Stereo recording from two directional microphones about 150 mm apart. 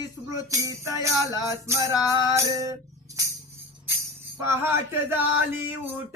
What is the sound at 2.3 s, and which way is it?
Music, 25° right (ahead or behind).